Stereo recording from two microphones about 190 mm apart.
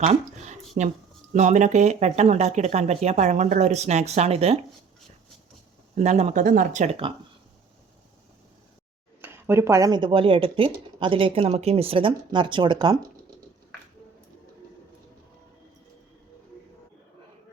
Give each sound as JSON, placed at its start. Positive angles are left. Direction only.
{"t": 0.0, "sound": "a sound", "side_deg": -40}
{"t": 1.3, "sound": "speech", "side_deg": -40}
{"t": 6.0, "sound": "speech", "side_deg": -35}
{"t": 9.2, "sound": "speech", "side_deg": -15}